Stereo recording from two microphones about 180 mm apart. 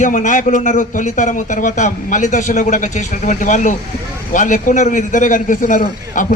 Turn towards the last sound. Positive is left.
turn(degrees=45)  # may be behind; listen again after turning